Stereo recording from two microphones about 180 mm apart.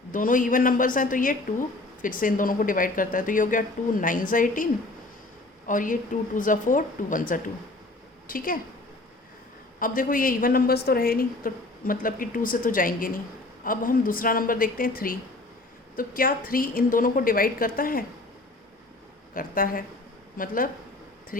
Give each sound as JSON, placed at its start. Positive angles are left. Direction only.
{"t": 0.1, "sound": "a woman's voice", "side_deg": 45}
{"t": 9.8, "sound": "a woman's voice", "side_deg": 50}
{"t": 19.3, "sound": "a woman's voice", "side_deg": 50}